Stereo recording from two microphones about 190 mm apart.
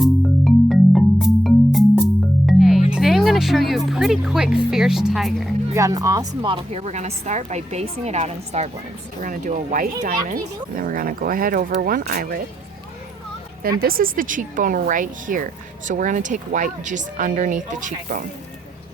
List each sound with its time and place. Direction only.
0.0 s music: centre (ahead or behind)
2.9 s speech: centre (ahead or behind)
5.7 s a woman's voice: 15° right (ahead or behind); by 12.4 s 50° right (ahead or behind)
13.6 s speech: 50° right (ahead or behind)